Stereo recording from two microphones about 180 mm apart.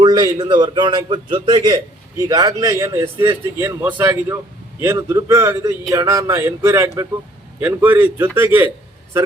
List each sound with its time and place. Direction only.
0.0 s a man's voice: 20° right (ahead or behind)